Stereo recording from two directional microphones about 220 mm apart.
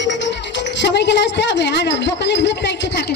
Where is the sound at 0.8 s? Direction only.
50° left (ahead or behind).